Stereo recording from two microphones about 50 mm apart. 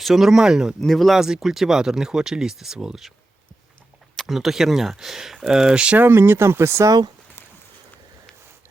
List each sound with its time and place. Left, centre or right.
0.0 s speech: centre
0.8 s speech: centre
1.2 s speech: centre
4.2 s speech: centre; by 6.0 s right
6.0 s speech: right